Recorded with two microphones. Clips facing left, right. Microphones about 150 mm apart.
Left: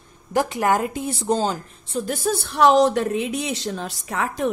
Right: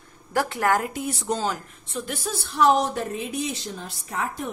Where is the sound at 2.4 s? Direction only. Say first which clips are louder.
Left 4 dB; 70° left (ahead or behind); by 4.5 s 90° left.